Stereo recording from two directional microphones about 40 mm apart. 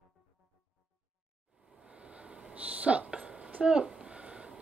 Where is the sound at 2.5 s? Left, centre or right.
Right.